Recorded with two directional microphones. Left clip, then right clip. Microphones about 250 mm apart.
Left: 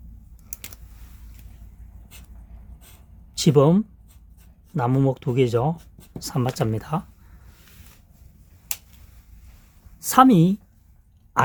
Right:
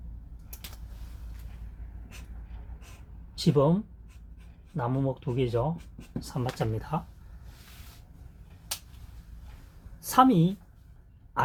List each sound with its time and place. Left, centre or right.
3.3 s speech: left
10.0 s a woman's voice: left